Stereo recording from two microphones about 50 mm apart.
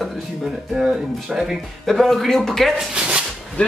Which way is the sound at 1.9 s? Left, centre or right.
Centre.